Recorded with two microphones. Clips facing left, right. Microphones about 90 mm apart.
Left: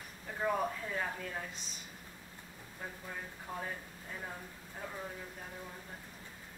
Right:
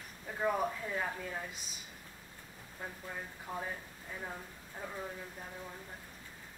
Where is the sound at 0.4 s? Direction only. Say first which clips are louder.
Right 1 dB; 5° right (ahead or behind).